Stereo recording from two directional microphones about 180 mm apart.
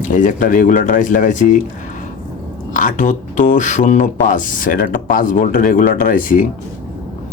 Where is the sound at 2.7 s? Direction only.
45° left (ahead or behind).